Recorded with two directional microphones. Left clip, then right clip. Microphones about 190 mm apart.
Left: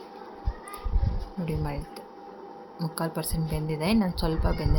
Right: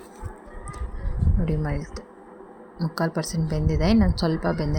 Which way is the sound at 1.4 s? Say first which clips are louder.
Right 3 dB; 20° right (ahead or behind).